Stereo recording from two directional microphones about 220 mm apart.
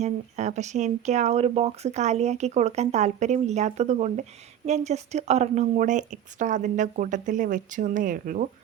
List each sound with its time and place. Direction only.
0.0 s speech: 30° right (ahead or behind)